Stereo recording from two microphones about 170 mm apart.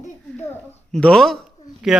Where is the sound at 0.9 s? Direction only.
5° left (ahead or behind).